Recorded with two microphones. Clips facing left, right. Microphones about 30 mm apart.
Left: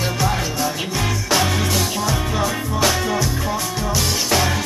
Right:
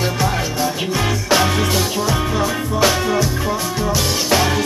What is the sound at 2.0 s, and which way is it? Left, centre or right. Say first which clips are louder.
Music: right 2 dB; centre.